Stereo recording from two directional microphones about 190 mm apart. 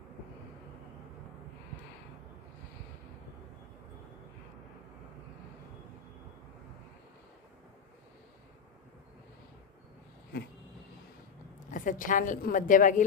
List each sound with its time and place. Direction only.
11.7 s a woman's voice: 45° left (ahead or behind)